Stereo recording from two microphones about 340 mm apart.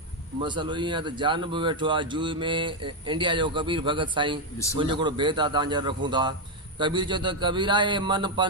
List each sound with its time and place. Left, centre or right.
0.4 s speech: centre